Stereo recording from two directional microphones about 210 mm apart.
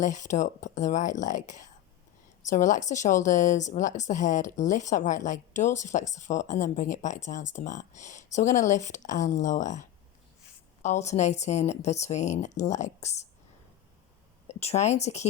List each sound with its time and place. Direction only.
0.0 s a woman's voice: 35° left (ahead or behind)
10.8 s a woman's voice: 35° left (ahead or behind)
14.4 s speech: 30° left (ahead or behind)